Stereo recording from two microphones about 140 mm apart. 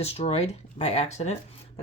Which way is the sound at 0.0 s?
45° left (ahead or behind).